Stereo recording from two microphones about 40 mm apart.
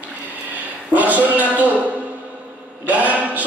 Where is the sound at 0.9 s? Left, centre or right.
Right.